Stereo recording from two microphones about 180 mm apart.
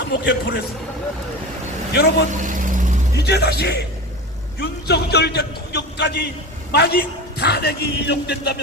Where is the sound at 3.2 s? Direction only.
65° left (ahead or behind).